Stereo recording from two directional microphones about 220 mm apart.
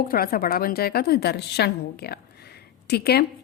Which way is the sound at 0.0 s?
40° left (ahead or behind).